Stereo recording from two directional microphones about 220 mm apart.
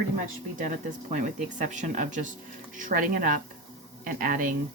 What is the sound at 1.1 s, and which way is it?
Speech, 35° right (ahead or behind).